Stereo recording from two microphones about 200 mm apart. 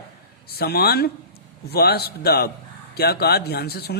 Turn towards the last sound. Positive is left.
turn(degrees=50)  # may be behind; listen again after turning